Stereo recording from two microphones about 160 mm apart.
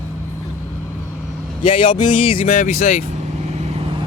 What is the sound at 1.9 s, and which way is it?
Speech, 50° left (ahead or behind).